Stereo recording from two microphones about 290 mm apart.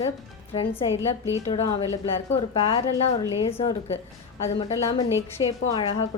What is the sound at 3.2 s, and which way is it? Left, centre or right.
A woman's voice, centre.